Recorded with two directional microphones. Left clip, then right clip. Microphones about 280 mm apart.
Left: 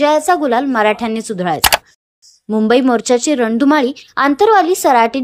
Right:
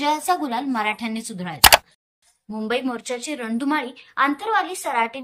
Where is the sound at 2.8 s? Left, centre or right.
Centre.